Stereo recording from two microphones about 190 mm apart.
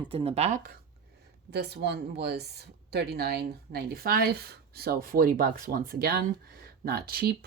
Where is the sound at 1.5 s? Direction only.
60° right (ahead or behind).